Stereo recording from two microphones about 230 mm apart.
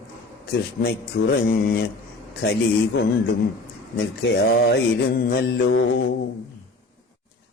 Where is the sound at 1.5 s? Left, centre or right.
Left.